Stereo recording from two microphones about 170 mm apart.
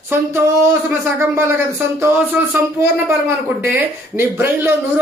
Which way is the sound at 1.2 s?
15° right (ahead or behind).